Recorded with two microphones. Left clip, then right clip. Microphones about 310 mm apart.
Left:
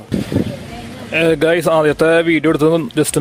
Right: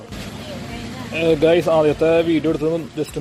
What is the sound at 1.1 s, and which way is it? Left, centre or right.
Speech, left.